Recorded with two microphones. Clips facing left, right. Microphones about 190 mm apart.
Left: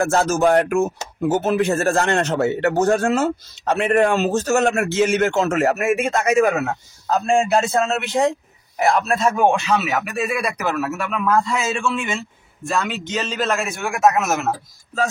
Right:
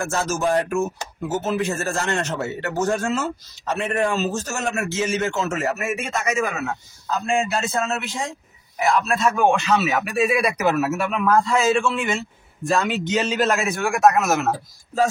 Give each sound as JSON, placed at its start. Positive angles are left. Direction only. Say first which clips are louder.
{"t": 0.0, "sound": "a man's voice", "louder": "left 6 dB", "side_deg": 60}
{"t": 9.7, "sound": "speech", "louder": "even", "side_deg": 5}
{"t": 10.1, "sound": "a man's voice", "louder": "right 3 dB", "side_deg": -5}